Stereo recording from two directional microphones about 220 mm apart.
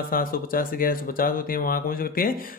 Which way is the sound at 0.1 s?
40° left (ahead or behind).